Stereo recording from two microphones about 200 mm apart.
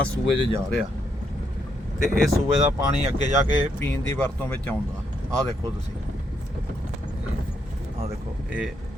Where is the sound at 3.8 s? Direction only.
10° left (ahead or behind).